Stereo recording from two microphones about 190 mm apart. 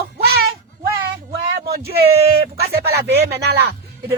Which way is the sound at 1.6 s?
55° right (ahead or behind).